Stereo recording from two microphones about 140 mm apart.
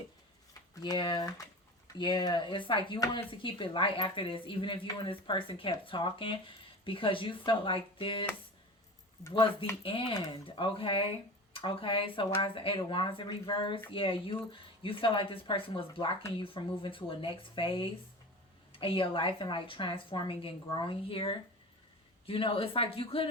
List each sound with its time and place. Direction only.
0.8 s speech: 30° left (ahead or behind)
9.3 s speech: 40° left (ahead or behind)